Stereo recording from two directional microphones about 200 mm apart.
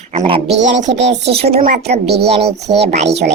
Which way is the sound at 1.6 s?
50° right (ahead or behind).